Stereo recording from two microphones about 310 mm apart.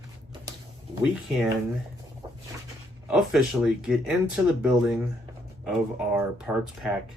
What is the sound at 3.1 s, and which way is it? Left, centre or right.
Speech, centre.